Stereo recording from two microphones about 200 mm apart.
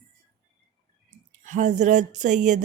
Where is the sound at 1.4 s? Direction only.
35° right (ahead or behind).